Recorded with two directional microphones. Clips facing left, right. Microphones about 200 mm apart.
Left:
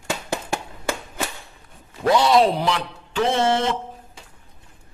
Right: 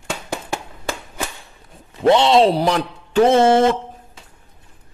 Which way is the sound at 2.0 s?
25° right (ahead or behind).